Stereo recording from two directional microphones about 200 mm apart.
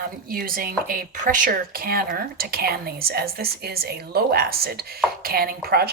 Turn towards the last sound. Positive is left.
turn(degrees=-50)  # may be behind; listen again after turning